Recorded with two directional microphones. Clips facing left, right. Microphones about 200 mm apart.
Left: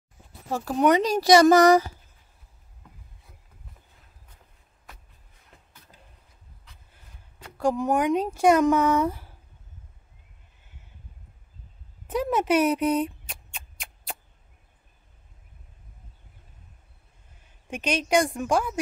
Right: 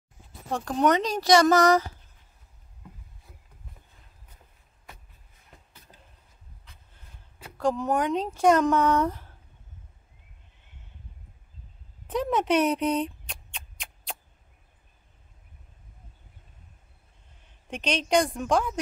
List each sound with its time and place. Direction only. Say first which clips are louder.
0.5 s speech: left 2 dB; 5° left (ahead or behind)
7.5 s speech: left 2 dB; 10° left (ahead or behind)
12.1 s a sound: left 1 dB; 5° left (ahead or behind)
17.6 s speech: left 1 dB; 5° left (ahead or behind)